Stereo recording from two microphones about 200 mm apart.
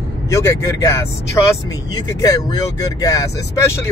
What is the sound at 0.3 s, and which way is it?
Speech, 15° left (ahead or behind).